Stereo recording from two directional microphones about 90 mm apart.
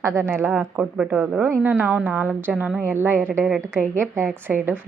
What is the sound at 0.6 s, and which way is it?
A woman's voice, 10° right (ahead or behind).